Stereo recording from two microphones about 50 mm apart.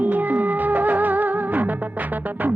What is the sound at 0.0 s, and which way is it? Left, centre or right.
Music, right.